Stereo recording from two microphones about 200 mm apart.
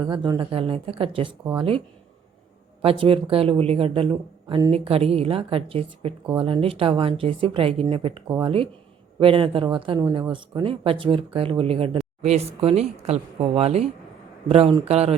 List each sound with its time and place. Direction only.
0.0 s speech: 20° right (ahead or behind)
2.8 s speech: 25° right (ahead or behind)